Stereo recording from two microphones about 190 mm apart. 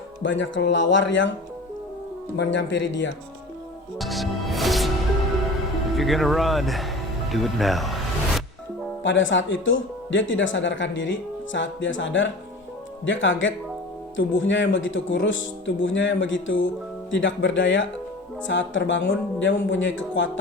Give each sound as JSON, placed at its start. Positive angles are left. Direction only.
{"t": 0.2, "sound": "speech", "side_deg": 75}
{"t": 2.3, "sound": "speech", "side_deg": 70}
{"t": 3.9, "sound": "music", "side_deg": 0}
{"t": 5.9, "sound": "speech", "side_deg": 0}
{"t": 9.0, "sound": "speech", "side_deg": 80}